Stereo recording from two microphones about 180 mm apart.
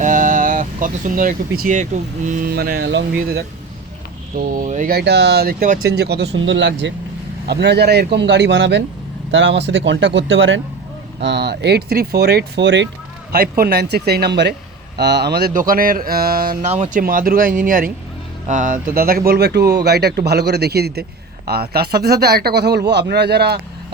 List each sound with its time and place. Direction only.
0.0 s a sound: 45° right (ahead or behind)
2.4 s speech: 55° right (ahead or behind)
4.4 s speech: 45° right (ahead or behind)
5.9 s speech: 65° right (ahead or behind); by 6.9 s 90° right
7.4 s speech: 65° right (ahead or behind); by 10.6 s 90° right
11.2 s speech: 75° right (ahead or behind)
13.3 s speech: 55° right (ahead or behind)
16.7 s speech: 40° right (ahead or behind)
17.0 s speech: 50° right (ahead or behind)